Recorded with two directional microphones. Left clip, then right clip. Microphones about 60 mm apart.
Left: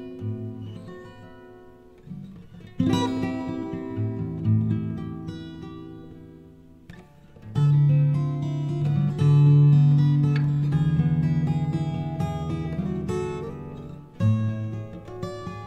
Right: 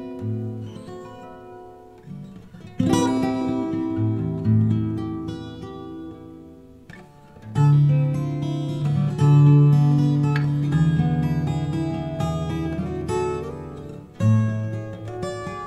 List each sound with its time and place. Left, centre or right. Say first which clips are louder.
2.8 s music: right 4 dB; left
7.5 s music: right 3 dB; left